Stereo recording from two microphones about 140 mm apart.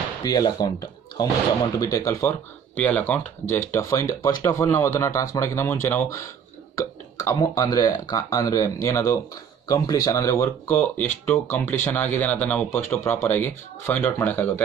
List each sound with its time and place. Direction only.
0.2 s speech: 25° left (ahead or behind)